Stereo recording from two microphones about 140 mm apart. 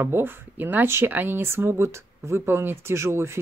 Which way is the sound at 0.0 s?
15° right (ahead or behind).